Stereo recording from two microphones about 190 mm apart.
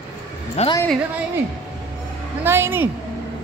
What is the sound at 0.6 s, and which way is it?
Speech, 35° left (ahead or behind).